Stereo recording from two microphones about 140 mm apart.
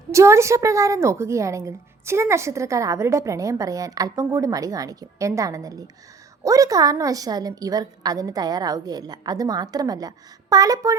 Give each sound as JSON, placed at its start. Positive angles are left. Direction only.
{"t": 0.1, "sound": "a woman's voice", "side_deg": -20}